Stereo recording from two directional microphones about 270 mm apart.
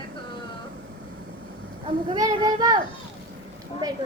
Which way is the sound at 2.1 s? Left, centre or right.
Centre.